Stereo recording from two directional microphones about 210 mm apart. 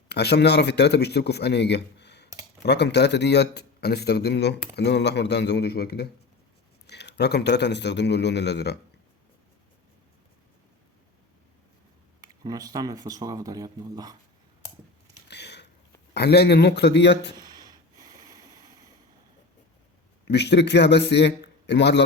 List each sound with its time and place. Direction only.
0.1 s a man's voice: 50° left (ahead or behind)
12.2 s speech: 15° right (ahead or behind)
15.3 s a sound: 55° left (ahead or behind)
16.1 s a man's voice: 50° left (ahead or behind)
17.3 s a sound: 20° right (ahead or behind)
20.2 s a man's voice: 55° left (ahead or behind)